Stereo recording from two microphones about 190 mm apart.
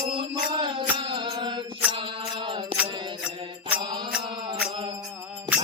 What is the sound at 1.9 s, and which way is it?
Mantra, 25° right (ahead or behind).